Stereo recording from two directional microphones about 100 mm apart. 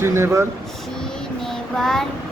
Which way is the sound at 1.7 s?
5° left (ahead or behind).